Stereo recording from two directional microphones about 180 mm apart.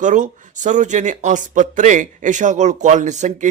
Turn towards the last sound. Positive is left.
turn(degrees=-40)  # may be behind; listen again after turning